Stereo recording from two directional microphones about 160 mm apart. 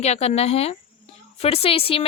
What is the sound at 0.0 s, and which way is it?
A woman's voice, 40° left (ahead or behind).